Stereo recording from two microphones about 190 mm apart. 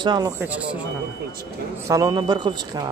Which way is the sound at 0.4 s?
5° right (ahead or behind).